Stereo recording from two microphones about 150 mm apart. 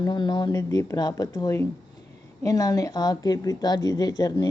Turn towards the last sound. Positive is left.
turn(degrees=25)  # may be behind; listen again after turning